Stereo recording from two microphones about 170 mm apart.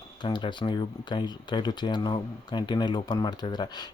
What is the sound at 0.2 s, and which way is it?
Speech, 25° left (ahead or behind).